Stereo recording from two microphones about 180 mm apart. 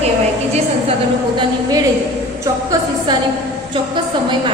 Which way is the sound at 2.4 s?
20° right (ahead or behind).